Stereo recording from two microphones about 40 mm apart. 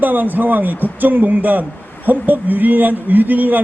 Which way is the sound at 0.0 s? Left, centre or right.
Right.